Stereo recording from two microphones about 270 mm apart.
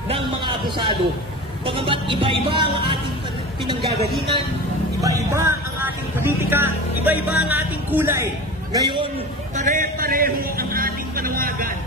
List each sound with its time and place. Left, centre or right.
0.1 s a man's voice: centre
1.7 s music: centre
5.0 s a man's voice: centre
9.6 s a man's voice: right